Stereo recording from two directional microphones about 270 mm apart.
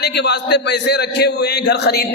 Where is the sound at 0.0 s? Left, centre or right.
Left.